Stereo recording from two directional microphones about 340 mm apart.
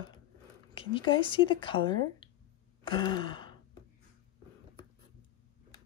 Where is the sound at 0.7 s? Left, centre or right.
Centre.